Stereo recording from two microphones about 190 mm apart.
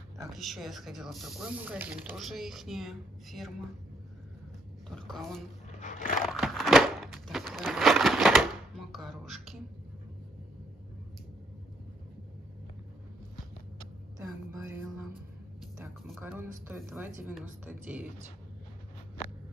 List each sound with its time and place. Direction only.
0.3 s speech: centre (ahead or behind)
4.8 s a woman's voice: centre (ahead or behind)
5.8 s biting: 40° left (ahead or behind)
6.2 s a sound: centre (ahead or behind)
14.1 s music: 15° right (ahead or behind)
16.1 s a sound: 10° right (ahead or behind)
16.6 s speech: 10° right (ahead or behind)